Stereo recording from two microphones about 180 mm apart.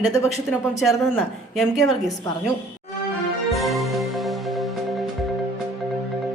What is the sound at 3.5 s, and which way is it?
Music, centre (ahead or behind).